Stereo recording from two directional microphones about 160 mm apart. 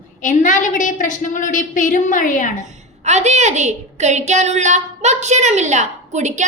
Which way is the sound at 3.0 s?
45° right (ahead or behind).